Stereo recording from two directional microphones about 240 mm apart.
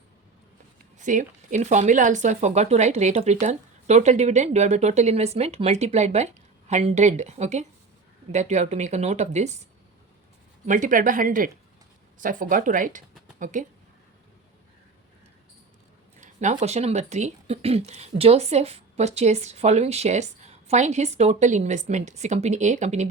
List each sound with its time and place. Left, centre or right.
0.9 s speech: right
10.7 s speech: right
16.2 s speech: right